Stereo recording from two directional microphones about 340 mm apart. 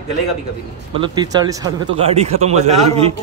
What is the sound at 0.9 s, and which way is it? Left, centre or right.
Speech, centre.